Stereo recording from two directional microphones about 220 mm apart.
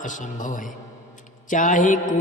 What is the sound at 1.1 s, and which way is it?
A man's voice, 35° left (ahead or behind).